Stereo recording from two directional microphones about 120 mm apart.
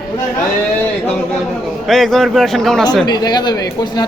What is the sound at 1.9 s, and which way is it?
Speech, centre (ahead or behind).